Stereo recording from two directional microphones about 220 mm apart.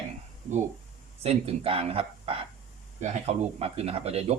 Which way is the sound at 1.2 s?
25° right (ahead or behind).